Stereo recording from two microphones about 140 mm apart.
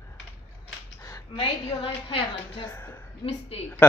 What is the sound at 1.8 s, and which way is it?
Music, 40° left (ahead or behind).